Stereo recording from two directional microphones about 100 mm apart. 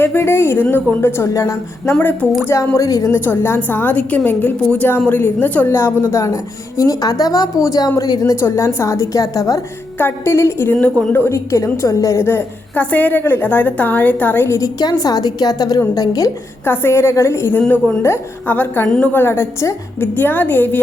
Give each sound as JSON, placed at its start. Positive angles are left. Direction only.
{"t": 0.0, "sound": "a woman's voice", "side_deg": 25}
{"t": 1.8, "sound": "speech", "side_deg": 20}
{"t": 2.5, "sound": "a woman's voice", "side_deg": 30}
{"t": 3.1, "sound": "a woman's voice", "side_deg": 25}
{"t": 12.2, "sound": "a woman's voice", "side_deg": 20}
{"t": 14.8, "sound": "a woman's voice", "side_deg": 40}
{"t": 16.6, "sound": "a woman's voice", "side_deg": 20}